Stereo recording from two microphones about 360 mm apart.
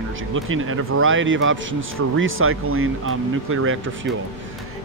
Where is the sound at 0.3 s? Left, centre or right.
Right.